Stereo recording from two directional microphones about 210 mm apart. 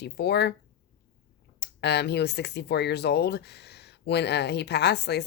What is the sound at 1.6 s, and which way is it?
Speech, 50° left (ahead or behind).